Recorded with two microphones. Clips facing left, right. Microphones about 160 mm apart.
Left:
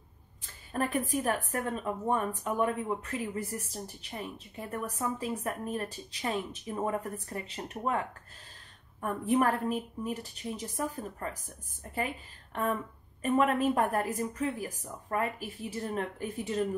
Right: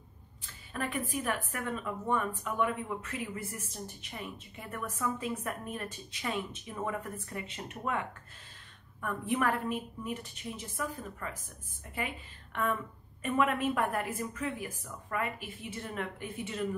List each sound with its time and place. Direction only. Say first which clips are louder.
0.4 s a woman's voice: left 5 dB; 40° left (ahead or behind)
9.0 s a woman's voice: left 4 dB; 35° left (ahead or behind)